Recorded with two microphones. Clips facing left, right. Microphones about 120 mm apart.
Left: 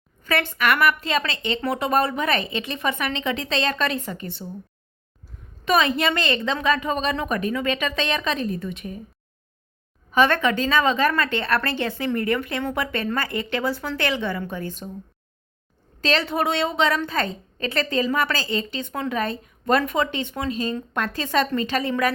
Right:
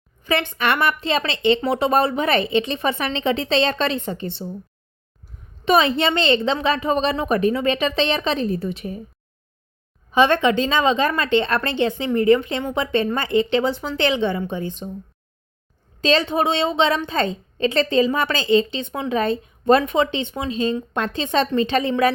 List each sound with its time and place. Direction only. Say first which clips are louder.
0.3 s a woman's voice: right 1 dB; 20° right (ahead or behind)
5.6 s a woman's voice: right 3 dB; 30° right (ahead or behind)
10.1 s a woman's voice: right 3 dB; 20° right (ahead or behind)
16.0 s a woman's voice: right 4 dB; 20° right (ahead or behind)